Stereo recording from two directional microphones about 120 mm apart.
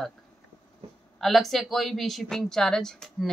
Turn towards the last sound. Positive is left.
turn(degrees=5)  # may be behind; listen again after turning